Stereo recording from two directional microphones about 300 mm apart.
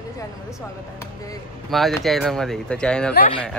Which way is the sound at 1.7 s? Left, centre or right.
Centre.